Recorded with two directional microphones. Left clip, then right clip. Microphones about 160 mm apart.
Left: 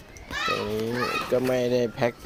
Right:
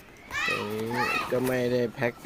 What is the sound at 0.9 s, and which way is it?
A child's voice, 15° left (ahead or behind).